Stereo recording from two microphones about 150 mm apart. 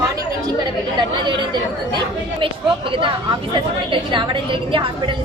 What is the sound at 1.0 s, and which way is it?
A woman's voice, 30° right (ahead or behind).